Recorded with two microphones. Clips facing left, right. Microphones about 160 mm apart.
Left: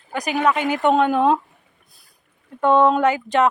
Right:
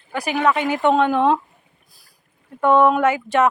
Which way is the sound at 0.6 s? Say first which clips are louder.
Even; 20° right (ahead or behind).